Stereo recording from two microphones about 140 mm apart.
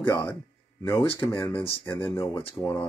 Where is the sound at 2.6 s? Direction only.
10° left (ahead or behind).